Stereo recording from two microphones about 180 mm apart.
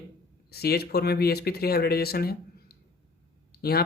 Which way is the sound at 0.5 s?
60° left (ahead or behind).